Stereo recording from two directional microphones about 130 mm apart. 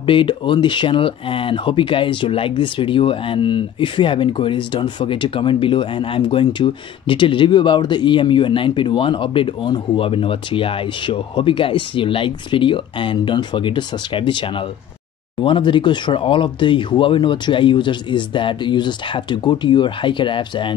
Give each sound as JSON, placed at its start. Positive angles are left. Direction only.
{"t": 0.0, "sound": "speech", "side_deg": 40}
{"t": 15.4, "sound": "speech", "side_deg": 40}